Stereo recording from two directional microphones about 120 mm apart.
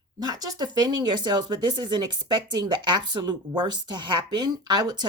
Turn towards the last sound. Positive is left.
turn(degrees=-35)  # may be behind; listen again after turning